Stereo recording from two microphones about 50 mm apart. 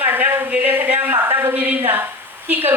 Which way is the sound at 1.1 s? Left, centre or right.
Right.